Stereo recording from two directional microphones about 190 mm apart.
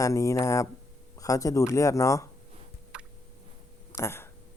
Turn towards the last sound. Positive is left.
turn(degrees=15)  # may be behind; listen again after turning